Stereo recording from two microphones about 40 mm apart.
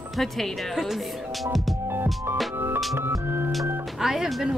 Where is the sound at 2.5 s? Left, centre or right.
Right.